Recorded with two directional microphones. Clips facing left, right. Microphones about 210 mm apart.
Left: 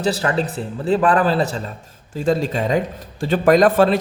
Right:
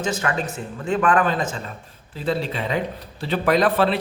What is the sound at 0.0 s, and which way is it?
Speech, 35° left (ahead or behind).